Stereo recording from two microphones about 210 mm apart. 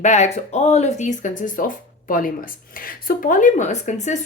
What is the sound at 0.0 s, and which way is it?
Speech, 35° left (ahead or behind).